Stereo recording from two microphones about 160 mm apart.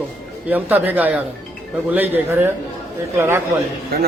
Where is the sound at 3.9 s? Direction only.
75° right (ahead or behind).